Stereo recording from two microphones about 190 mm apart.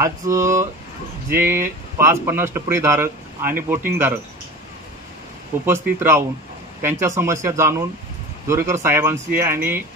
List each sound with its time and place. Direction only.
0.0 s speech: 15° right (ahead or behind)
5.7 s speech: 15° right (ahead or behind)